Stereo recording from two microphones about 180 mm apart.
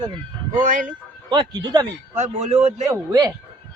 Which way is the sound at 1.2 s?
25° right (ahead or behind).